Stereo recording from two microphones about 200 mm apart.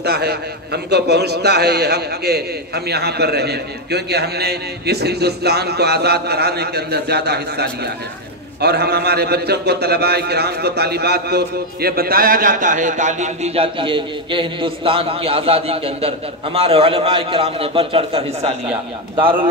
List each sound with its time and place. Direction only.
0.0 s a man's voice: 55° right (ahead or behind); by 18.5 s 30° right (ahead or behind)